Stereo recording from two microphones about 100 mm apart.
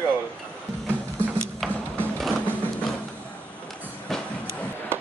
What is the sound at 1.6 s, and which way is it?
Music, centre (ahead or behind).